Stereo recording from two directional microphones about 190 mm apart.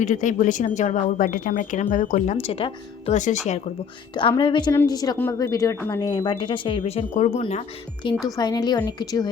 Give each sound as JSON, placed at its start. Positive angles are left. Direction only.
{"t": 0.0, "sound": "speech", "side_deg": 40}
{"t": 4.1, "sound": "speech", "side_deg": 25}
{"t": 8.0, "sound": "speech", "side_deg": 25}